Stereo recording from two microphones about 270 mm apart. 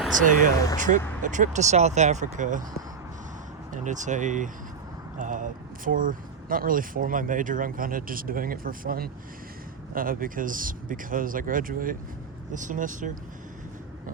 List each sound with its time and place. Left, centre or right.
0.2 s speech: right
3.7 s speech: right